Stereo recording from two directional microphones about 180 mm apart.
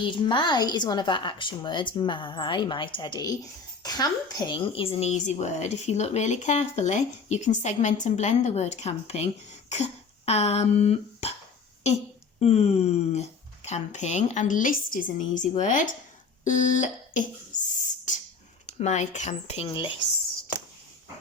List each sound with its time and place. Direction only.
0.0 s a woman's voice: 25° left (ahead or behind)
12.4 s a woman's voice: 35° left (ahead or behind)
18.1 s a sound: 45° left (ahead or behind)
18.8 s a woman's voice: 40° left (ahead or behind)